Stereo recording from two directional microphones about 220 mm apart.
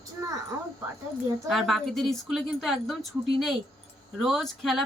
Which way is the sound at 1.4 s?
Centre (ahead or behind).